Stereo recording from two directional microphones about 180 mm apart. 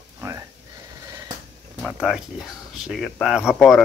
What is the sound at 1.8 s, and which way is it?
Speech, 5° right (ahead or behind).